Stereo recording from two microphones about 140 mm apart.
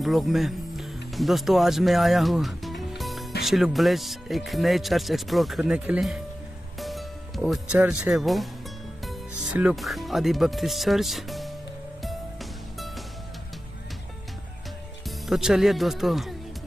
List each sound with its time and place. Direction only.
0.0 s speech: centre (ahead or behind)
6.8 s music: centre (ahead or behind)
7.8 s speech: 5° right (ahead or behind)
9.0 s music: centre (ahead or behind)
9.8 s speech: centre (ahead or behind)
12.0 s music: centre (ahead or behind)
15.0 s speech: centre (ahead or behind)